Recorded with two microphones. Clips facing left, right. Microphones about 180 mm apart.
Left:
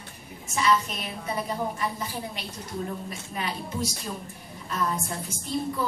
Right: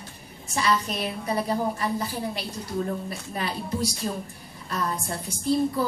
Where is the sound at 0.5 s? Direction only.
35° right (ahead or behind).